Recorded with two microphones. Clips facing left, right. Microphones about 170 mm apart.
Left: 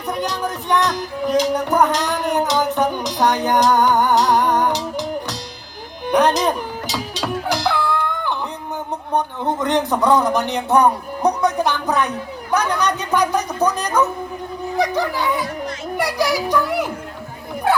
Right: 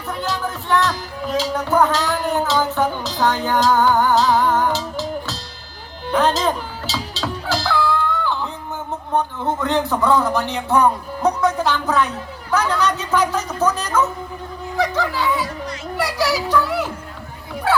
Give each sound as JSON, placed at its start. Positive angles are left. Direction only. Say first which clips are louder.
{"t": 0.1, "sound": "music", "louder": "left 2 dB", "side_deg": 15}
{"t": 9.1, "sound": "speech", "louder": "even", "side_deg": 15}